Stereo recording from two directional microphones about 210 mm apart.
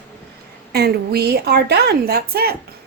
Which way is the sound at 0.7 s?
50° right (ahead or behind).